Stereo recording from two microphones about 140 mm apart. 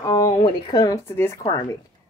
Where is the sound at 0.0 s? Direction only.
25° left (ahead or behind).